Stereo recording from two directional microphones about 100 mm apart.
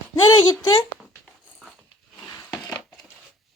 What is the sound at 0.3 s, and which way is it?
Speech, 50° left (ahead or behind).